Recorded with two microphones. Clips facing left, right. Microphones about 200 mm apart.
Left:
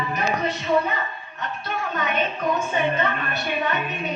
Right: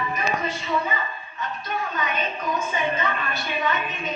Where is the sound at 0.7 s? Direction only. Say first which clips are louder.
Left 5 dB; 65° left (ahead or behind).